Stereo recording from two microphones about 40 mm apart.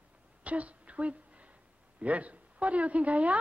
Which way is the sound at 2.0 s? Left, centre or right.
Right.